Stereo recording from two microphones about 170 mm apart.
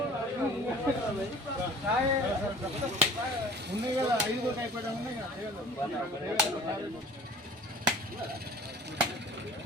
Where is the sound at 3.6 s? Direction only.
85° right.